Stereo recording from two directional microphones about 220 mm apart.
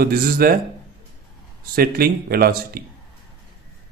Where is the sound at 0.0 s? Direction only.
40° right (ahead or behind).